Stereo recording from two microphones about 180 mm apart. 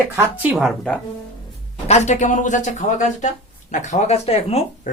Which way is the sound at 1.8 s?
40° left (ahead or behind).